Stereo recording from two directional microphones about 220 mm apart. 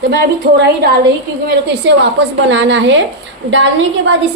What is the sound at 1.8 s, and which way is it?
A woman's voice, 50° right (ahead or behind).